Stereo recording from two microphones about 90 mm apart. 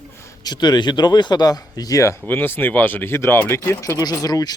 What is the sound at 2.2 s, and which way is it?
Speech, 25° left (ahead or behind).